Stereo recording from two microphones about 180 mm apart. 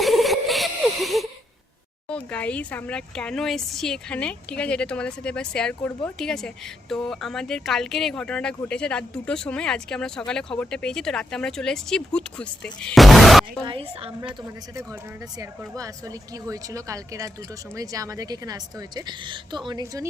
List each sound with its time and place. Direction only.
0.0 s a sound: centre (ahead or behind)
2.0 s speech: 5° left (ahead or behind)
13.7 s a woman's voice: 30° right (ahead or behind)
15.4 s a woman's voice: 20° right (ahead or behind)